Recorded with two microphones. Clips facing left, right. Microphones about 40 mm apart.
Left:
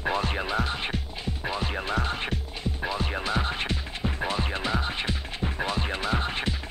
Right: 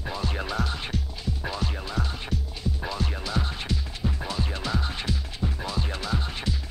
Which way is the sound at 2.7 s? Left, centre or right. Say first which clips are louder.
Left 5 dB; left.